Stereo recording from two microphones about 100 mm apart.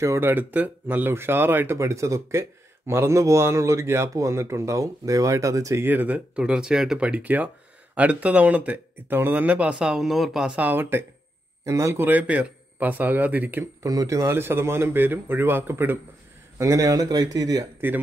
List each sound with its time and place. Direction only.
0.0 s a man's voice: 25° right (ahead or behind)
5.9 s speech: 15° right (ahead or behind)
13.8 s a man's voice: 35° right (ahead or behind)
16.5 s speech: 35° right (ahead or behind)
17.7 s speech: 20° right (ahead or behind)